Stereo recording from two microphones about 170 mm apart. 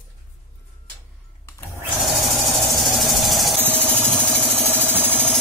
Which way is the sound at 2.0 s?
Centre (ahead or behind).